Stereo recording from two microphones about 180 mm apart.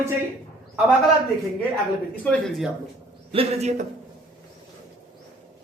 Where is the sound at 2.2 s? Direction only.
10° left (ahead or behind).